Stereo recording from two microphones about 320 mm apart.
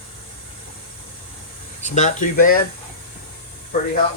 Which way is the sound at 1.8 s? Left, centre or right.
Left.